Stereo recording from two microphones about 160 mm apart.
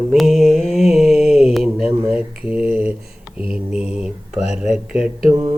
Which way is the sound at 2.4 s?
10° right (ahead or behind).